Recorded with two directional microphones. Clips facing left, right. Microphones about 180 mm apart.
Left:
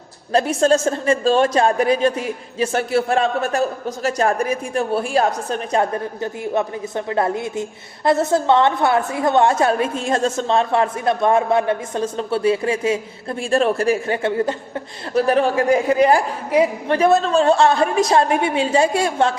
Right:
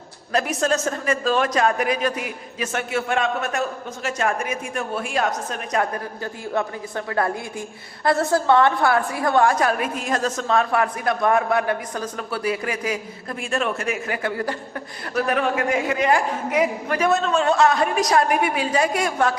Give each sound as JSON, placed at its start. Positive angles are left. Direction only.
{"t": 0.3, "sound": "a woman's voice", "side_deg": 30}